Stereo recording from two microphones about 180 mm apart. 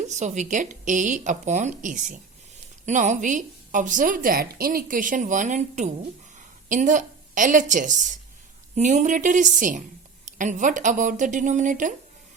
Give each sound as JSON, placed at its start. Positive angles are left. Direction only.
{"t": 0.1, "sound": "a woman's voice", "side_deg": -40}